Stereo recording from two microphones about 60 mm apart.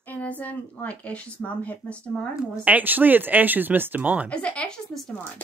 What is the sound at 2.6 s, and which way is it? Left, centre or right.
Speech, right.